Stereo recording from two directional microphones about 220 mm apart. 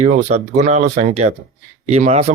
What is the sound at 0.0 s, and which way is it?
Speech, 30° right (ahead or behind).